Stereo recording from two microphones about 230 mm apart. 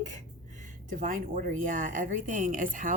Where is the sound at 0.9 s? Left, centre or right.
Right.